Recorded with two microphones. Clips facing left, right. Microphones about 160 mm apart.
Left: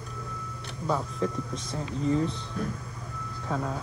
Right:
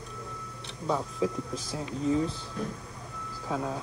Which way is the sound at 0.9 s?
Centre (ahead or behind).